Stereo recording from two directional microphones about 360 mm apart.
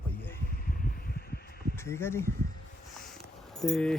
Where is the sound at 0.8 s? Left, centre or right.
Left.